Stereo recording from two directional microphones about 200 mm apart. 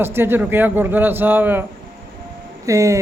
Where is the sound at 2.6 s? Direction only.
15° right (ahead or behind).